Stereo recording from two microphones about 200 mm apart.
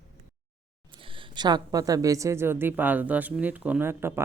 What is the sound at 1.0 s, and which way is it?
Speech, 25° right (ahead or behind).